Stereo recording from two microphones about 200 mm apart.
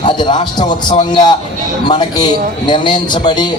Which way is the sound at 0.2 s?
20° left (ahead or behind).